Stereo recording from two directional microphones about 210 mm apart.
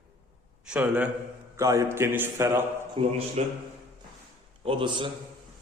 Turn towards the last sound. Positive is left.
turn(degrees=-25)  # may be behind; listen again after turning